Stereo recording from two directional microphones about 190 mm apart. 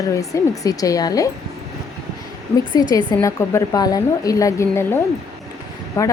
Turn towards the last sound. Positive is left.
turn(degrees=15)  # may be behind; listen again after turning